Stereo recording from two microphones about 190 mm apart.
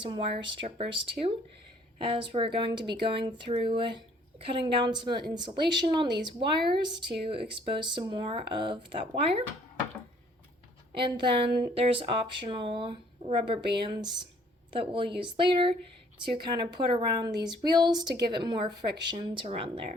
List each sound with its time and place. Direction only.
0.0 s speech: 25° right (ahead or behind)
10.9 s speech: 25° right (ahead or behind)